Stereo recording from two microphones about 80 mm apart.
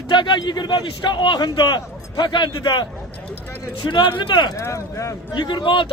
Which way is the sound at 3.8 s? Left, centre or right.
Left.